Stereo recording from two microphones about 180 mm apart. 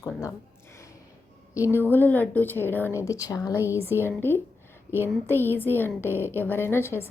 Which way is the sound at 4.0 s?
10° left (ahead or behind).